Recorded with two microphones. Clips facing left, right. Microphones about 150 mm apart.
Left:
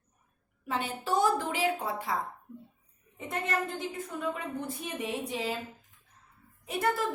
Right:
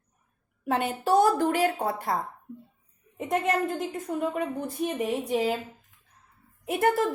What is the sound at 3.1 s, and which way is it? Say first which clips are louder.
A woman's voice: right 7 dB; 50° right (ahead or behind).